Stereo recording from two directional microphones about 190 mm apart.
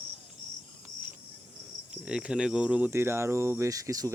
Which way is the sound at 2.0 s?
5° right (ahead or behind).